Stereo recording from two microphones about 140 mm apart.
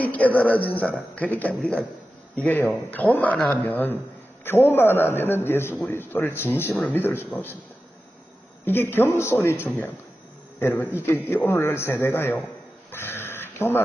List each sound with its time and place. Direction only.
0.0 s a man's voice: 10° left (ahead or behind)
8.6 s a man's voice: 15° left (ahead or behind)
12.9 s a sound: 15° left (ahead or behind)